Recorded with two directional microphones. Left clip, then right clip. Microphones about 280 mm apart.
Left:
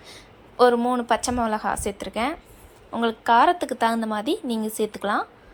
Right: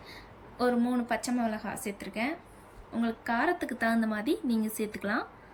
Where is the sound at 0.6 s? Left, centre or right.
Left.